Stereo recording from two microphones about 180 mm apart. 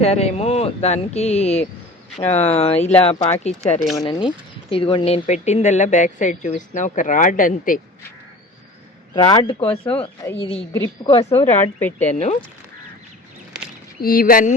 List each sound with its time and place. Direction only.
0.0 s speech: 35° left (ahead or behind)
4.0 s speech: 25° left (ahead or behind); by 7.8 s 50° left (ahead or behind)
9.2 s speech: 25° left (ahead or behind)
10.7 s speech: 20° left (ahead or behind)
11.0 s speech: 35° left (ahead or behind)
11.8 s speech: 10° left (ahead or behind)
12.1 s speech: 40° left (ahead or behind)
14.0 s speech: 55° left (ahead or behind)